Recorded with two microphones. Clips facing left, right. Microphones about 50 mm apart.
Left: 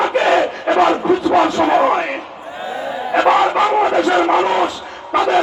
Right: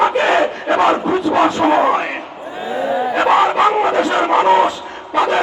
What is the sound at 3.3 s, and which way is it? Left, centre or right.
Crowd, right.